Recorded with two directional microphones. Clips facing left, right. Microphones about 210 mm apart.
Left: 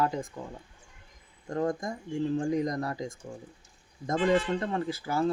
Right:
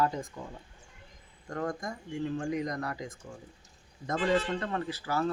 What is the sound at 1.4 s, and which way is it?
Speech, 20° left (ahead or behind).